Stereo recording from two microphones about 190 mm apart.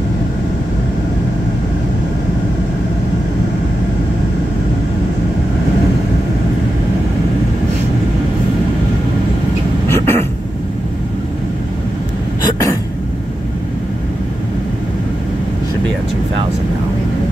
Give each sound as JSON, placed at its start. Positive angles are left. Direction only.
{"t": 9.8, "sound": "vehicle", "side_deg": 15}